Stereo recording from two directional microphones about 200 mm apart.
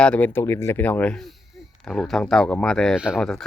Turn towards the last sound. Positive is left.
turn(degrees=0)  # may be behind; listen again after turning